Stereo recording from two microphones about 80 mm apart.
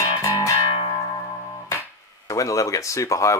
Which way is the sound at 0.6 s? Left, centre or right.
Left.